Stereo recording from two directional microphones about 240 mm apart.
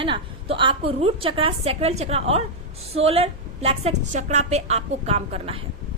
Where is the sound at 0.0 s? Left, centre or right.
Right.